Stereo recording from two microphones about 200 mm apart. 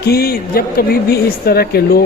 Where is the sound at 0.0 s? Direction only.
50° left (ahead or behind).